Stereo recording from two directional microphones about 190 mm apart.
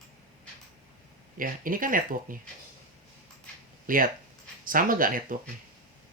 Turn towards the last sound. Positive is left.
turn(degrees=-45)  # may be behind; listen again after turning